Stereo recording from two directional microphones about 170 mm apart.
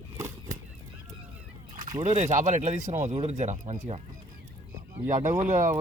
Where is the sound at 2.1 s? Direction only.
45° right (ahead or behind).